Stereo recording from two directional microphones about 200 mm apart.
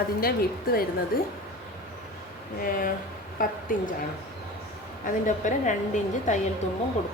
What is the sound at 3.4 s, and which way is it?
Speech, 40° left (ahead or behind).